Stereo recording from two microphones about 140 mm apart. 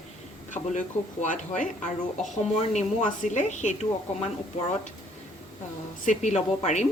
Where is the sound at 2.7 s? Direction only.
60° left (ahead or behind).